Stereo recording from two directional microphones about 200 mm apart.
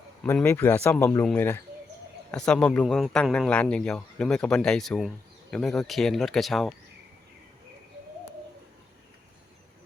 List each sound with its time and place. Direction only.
0.2 s speech: 10° left (ahead or behind)